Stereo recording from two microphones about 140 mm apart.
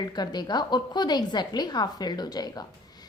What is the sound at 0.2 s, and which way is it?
A woman's voice, 30° left (ahead or behind).